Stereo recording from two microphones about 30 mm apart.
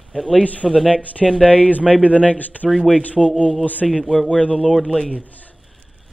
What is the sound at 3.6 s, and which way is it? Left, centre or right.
Speech, left.